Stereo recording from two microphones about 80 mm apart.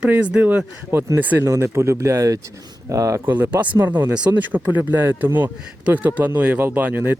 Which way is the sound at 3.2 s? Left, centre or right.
Right.